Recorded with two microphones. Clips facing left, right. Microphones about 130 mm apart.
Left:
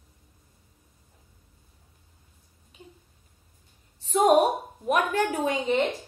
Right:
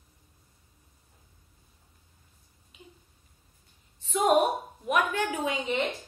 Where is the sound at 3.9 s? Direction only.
40° left (ahead or behind).